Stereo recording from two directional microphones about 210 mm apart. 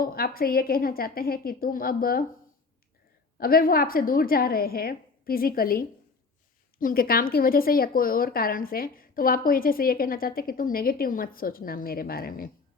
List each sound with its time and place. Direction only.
0.0 s a woman's voice: 45° left (ahead or behind)
3.3 s a woman's voice: 45° left (ahead or behind)